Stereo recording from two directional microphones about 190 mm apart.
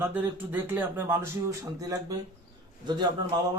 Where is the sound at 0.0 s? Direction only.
10° right (ahead or behind).